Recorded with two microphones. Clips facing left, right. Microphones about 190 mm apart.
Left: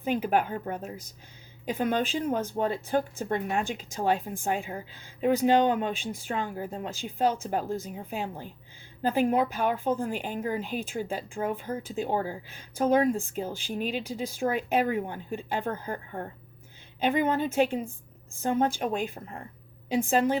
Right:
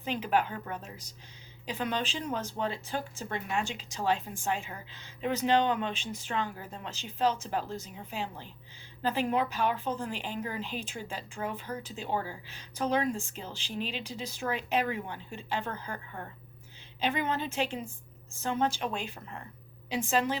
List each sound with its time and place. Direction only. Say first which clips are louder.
0.0 s speech: left 3 dB; 50° left (ahead or behind)